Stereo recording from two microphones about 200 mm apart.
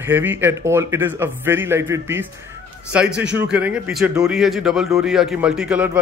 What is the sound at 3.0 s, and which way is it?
Speech, 60° right (ahead or behind).